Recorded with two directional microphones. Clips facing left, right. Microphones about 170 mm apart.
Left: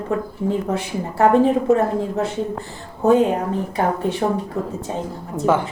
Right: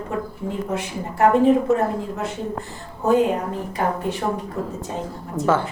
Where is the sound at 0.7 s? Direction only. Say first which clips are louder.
Left 3 dB; 30° left (ahead or behind).